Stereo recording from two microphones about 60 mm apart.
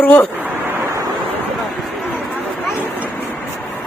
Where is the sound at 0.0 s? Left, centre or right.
Left.